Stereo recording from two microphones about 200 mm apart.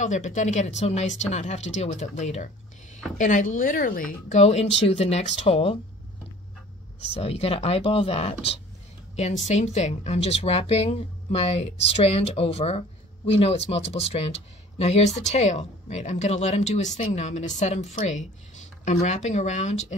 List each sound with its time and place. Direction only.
0.0 s a woman's voice: 40° left (ahead or behind)
7.2 s a woman's voice: 30° left (ahead or behind)